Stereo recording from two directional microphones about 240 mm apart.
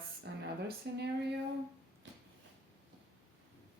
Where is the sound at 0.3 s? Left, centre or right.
Right.